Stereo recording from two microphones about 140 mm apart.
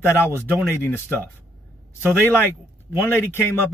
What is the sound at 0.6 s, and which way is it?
Speech, 15° left (ahead or behind).